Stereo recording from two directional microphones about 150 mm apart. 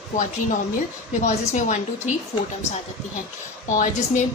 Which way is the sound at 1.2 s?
55° left (ahead or behind).